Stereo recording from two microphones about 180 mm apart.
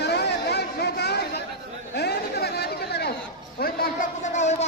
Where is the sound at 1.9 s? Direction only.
65° left (ahead or behind).